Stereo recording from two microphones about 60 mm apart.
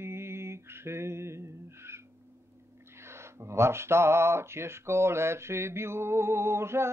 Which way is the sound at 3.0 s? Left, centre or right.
Right.